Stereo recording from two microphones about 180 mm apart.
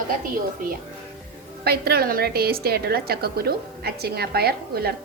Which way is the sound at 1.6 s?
60° right (ahead or behind).